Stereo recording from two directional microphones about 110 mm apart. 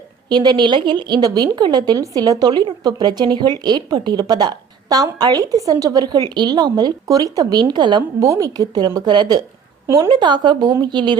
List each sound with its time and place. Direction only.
0.3 s a woman's voice: 40° right (ahead or behind)
8.2 s a woman's voice: 30° right (ahead or behind)
9.8 s a woman's voice: 25° right (ahead or behind)
10.1 s speech: 45° right (ahead or behind)